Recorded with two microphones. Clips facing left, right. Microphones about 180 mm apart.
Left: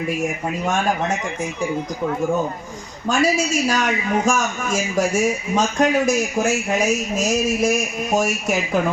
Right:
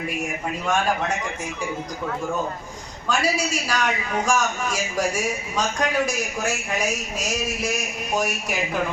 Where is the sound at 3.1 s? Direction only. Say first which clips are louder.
Left 5 dB; 45° left (ahead or behind).